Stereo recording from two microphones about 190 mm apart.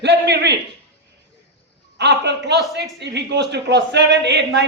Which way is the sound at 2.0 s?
65° right (ahead or behind).